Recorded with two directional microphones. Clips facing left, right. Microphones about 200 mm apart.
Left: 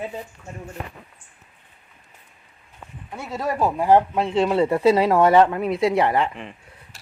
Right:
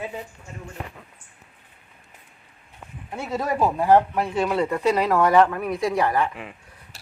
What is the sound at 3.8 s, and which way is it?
Speech, 15° left (ahead or behind).